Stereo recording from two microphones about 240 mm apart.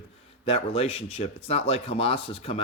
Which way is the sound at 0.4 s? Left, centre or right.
Left.